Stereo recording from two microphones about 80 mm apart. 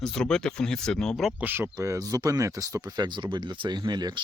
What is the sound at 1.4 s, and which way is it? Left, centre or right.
Speech, right.